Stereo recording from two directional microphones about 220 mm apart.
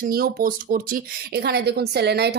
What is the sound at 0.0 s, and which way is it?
Speech, 40° right (ahead or behind).